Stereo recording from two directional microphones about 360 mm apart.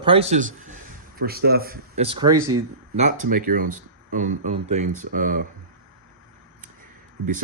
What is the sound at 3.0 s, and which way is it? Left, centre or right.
Speech, right.